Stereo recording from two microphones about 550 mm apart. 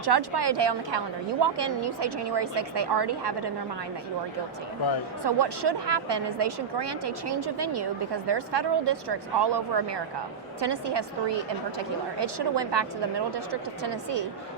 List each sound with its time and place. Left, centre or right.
0.0 s a woman's voice: right
5.2 s a woman's voice: right